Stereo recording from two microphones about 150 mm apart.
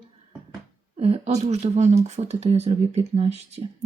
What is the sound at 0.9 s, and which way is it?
Speech, 45° right (ahead or behind).